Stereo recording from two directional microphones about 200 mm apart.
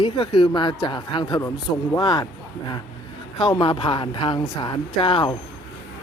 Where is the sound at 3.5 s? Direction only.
25° left (ahead or behind).